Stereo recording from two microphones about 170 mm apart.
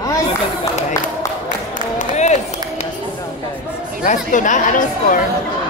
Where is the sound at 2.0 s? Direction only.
45° left (ahead or behind).